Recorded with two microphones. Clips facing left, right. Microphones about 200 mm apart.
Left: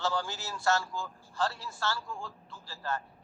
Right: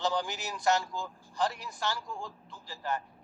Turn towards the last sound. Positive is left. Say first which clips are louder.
# right 1 dB
turn(degrees=-15)  # may be behind; listen again after turning